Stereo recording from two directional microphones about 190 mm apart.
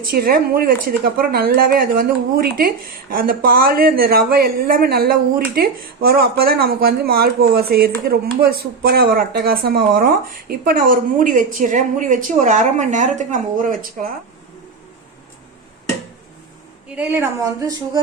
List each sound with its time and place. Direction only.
0.1 s speech: 50° right (ahead or behind)
16.9 s a woman's voice: 10° right (ahead or behind)